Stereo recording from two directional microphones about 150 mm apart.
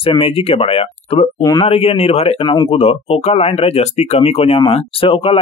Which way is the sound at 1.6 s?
40° left (ahead or behind).